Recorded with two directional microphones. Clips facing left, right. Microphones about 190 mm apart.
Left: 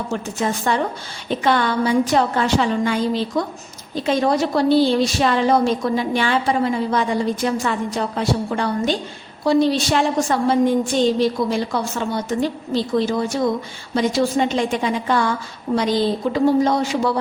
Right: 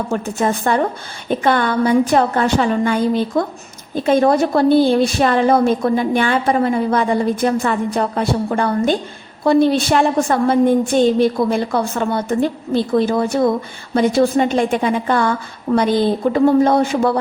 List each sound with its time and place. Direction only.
0.1 s a woman's voice: 50° right (ahead or behind)